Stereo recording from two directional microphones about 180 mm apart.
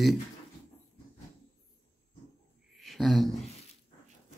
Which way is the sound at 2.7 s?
Centre (ahead or behind).